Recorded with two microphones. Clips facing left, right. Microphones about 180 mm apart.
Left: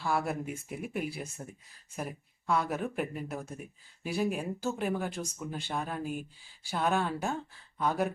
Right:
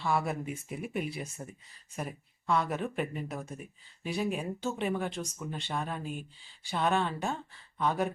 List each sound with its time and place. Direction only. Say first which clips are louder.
0.0 s speech: even; centre (ahead or behind)